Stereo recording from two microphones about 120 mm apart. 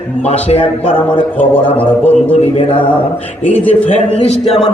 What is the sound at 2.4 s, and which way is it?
Speech, 60° left (ahead or behind).